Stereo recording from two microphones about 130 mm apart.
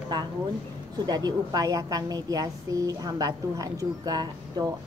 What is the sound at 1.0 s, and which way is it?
A woman's voice, 30° right (ahead or behind).